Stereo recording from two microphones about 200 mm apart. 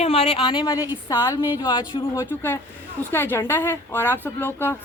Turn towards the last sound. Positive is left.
turn(degrees=10)  # may be behind; listen again after turning